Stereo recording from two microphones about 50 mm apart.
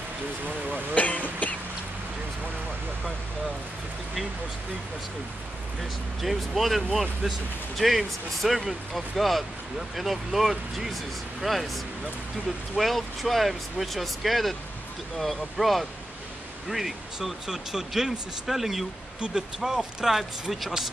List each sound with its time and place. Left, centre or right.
0.9 s speech: left
6.2 s speech: centre
19.1 s speech: centre
19.6 s speech: centre